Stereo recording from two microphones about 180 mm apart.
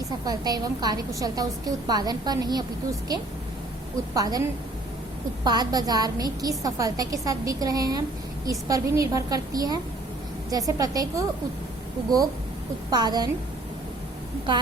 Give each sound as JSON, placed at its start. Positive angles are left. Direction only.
{"t": 0.3, "sound": "a woman's voice", "side_deg": -20}
{"t": 12.9, "sound": "a woman's voice", "side_deg": -25}